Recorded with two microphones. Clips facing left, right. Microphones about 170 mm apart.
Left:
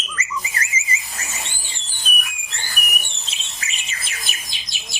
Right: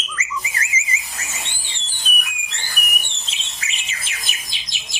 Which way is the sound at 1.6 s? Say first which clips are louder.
Even; 45° left (ahead or behind).